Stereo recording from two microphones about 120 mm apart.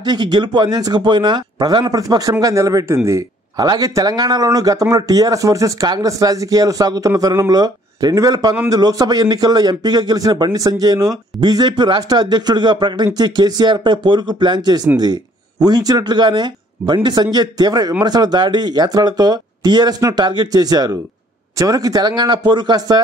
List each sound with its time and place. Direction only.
0.0 s a man's voice: 40° right (ahead or behind)